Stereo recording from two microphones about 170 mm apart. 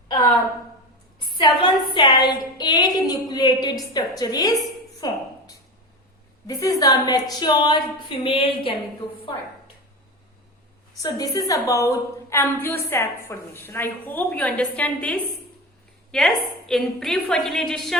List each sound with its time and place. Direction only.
1.4 s a woman's voice: 25° left (ahead or behind)
4.9 s a sound: 25° left (ahead or behind)
6.5 s a woman's voice: 20° left (ahead or behind)
10.9 s a woman's voice: 20° left (ahead or behind); by 17.9 s centre (ahead or behind)